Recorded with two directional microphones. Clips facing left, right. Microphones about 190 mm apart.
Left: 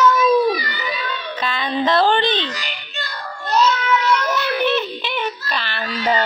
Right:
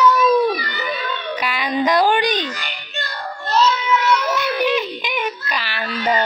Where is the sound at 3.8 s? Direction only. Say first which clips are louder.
Even; 10° right (ahead or behind).